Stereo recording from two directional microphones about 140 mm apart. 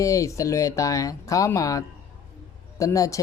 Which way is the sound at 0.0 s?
20° left (ahead or behind).